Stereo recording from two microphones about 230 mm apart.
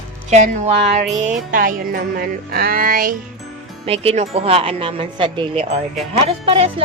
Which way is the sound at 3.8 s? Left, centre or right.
Right.